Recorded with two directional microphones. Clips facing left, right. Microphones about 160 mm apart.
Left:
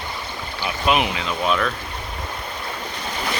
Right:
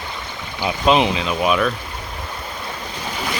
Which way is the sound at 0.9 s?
25° right (ahead or behind).